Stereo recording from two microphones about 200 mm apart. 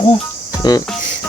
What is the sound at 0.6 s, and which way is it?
Cricket, 20° left (ahead or behind).